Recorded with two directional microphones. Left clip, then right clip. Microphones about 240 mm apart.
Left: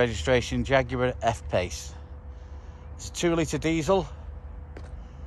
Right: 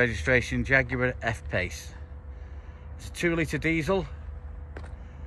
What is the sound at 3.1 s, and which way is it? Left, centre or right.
Speech, centre.